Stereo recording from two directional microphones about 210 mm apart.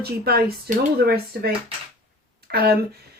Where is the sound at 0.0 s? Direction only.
45° right (ahead or behind).